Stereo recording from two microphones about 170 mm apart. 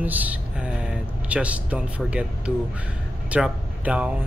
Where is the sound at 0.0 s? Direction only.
10° right (ahead or behind).